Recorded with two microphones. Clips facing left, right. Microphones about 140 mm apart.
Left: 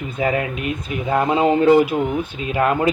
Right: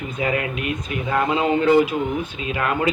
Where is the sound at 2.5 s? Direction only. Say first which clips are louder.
Left 5 dB; 35° left (ahead or behind).